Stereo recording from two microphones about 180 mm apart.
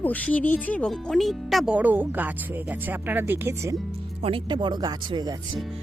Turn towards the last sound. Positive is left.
turn(degrees=-20)  # may be behind; listen again after turning